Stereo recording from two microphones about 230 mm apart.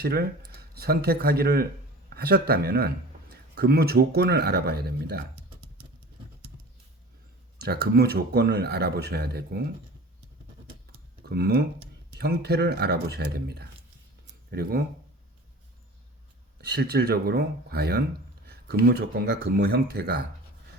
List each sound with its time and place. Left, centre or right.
0.0 s speech: right
7.6 s speech: right
11.3 s speech: right
16.6 s speech: right